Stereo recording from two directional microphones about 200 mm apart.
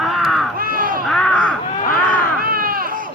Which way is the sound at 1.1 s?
5° left (ahead or behind).